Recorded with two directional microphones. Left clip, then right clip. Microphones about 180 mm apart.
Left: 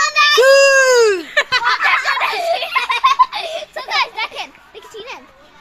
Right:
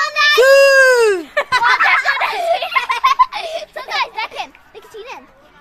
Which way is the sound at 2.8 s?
10° left (ahead or behind).